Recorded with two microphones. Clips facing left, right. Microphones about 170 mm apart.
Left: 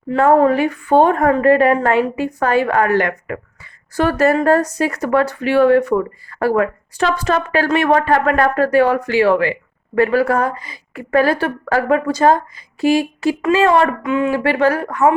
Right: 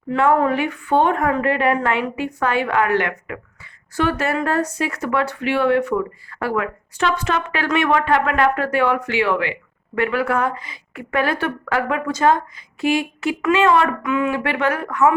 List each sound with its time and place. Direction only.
0.1 s a woman's voice: 35° left (ahead or behind)